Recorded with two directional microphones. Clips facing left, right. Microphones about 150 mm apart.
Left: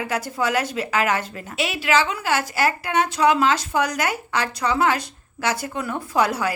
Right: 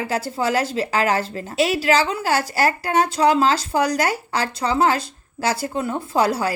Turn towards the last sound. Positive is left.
turn(degrees=-30)  # may be behind; listen again after turning